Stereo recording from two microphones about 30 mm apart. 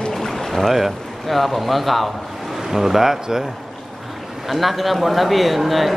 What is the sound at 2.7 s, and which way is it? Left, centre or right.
Speech, centre.